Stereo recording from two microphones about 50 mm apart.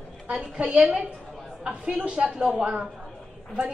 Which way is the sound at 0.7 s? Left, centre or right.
Right.